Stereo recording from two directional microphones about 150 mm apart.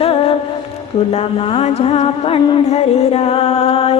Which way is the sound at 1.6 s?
40° left (ahead or behind).